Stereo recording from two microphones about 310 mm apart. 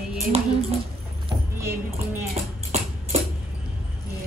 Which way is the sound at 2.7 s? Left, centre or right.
Right.